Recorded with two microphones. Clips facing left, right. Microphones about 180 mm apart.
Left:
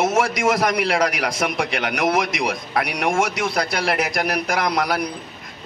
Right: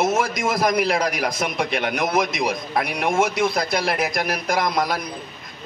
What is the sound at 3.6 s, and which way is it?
Speech, 70° left (ahead or behind).